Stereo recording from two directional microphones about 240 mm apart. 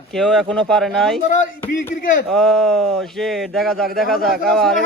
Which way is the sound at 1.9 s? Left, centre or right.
Left.